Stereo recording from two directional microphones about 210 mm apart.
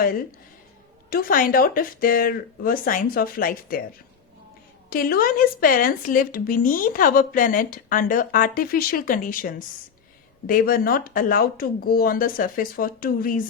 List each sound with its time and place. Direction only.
1.1 s speech: 40° left (ahead or behind)
4.9 s speech: 45° left (ahead or behind)